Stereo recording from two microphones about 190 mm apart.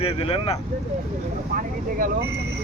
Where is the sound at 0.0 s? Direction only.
30° left (ahead or behind).